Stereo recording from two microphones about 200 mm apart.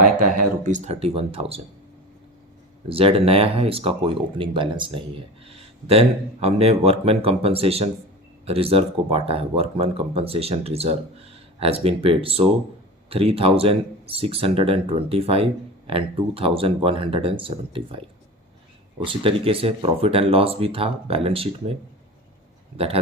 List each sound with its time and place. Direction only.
0.3 s speech: 40° right (ahead or behind)
2.9 s speech: 30° right (ahead or behind)